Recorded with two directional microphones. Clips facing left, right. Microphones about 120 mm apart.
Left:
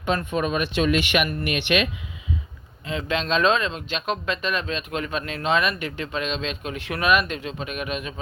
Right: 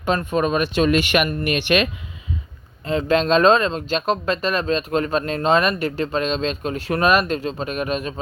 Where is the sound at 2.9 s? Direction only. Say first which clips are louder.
Right 7 dB; 40° right (ahead or behind).